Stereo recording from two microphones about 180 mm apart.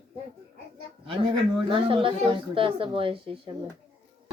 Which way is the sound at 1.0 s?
25° right (ahead or behind).